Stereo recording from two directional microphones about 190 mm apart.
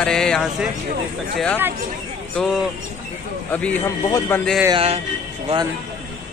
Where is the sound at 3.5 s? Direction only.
10° left (ahead or behind).